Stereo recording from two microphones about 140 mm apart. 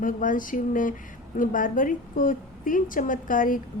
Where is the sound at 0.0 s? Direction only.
75° left (ahead or behind).